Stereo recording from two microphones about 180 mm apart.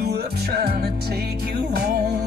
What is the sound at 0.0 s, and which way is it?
Music, 65° right (ahead or behind).